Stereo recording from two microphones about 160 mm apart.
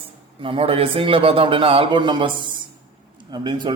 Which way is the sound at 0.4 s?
35° right (ahead or behind).